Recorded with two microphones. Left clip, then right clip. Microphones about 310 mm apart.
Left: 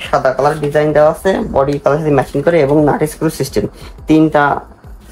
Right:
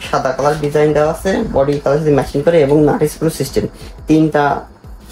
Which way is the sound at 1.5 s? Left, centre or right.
Centre.